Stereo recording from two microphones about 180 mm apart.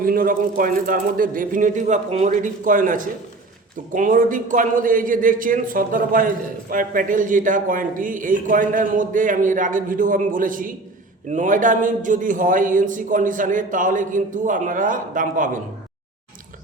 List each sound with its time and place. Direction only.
0.0 s a man's voice: 50° right (ahead or behind)